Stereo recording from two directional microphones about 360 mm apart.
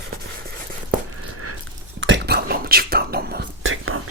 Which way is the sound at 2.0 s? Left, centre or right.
Right.